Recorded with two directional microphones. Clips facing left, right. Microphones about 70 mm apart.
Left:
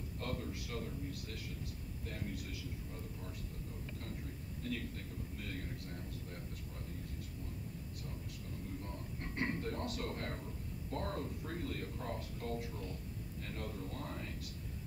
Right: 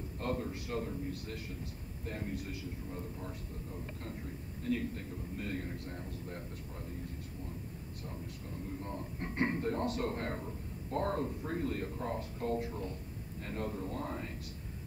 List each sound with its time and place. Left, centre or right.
0.2 s a man's voice: right
8.6 s a man's voice: right